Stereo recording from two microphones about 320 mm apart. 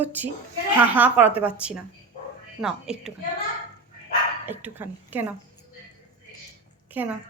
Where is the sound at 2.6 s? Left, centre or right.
Centre.